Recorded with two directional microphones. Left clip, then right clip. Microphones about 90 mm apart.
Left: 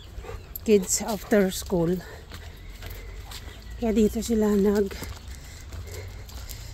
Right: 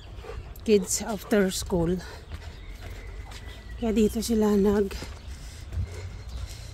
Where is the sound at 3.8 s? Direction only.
20° left (ahead or behind).